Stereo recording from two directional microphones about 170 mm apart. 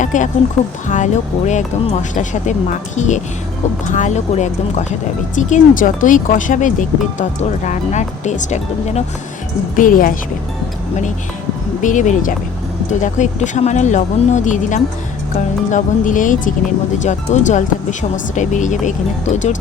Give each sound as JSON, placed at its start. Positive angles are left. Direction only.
{"t": 0.0, "sound": "speech", "side_deg": 45}
{"t": 11.8, "sound": "speech", "side_deg": 50}